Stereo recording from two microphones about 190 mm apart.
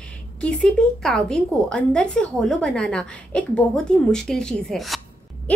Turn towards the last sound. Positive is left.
turn(degrees=5)  # may be behind; listen again after turning